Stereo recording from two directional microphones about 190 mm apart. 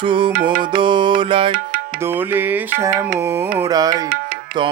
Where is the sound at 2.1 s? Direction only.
10° right (ahead or behind).